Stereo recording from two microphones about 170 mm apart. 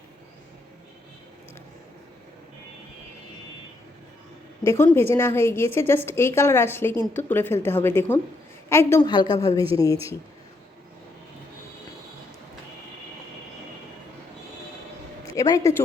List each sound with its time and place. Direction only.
4.6 s a woman's voice: 15° left (ahead or behind)
15.4 s speech: 20° left (ahead or behind)